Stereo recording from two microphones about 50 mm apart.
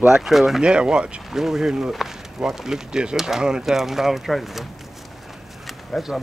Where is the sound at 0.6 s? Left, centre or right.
Centre.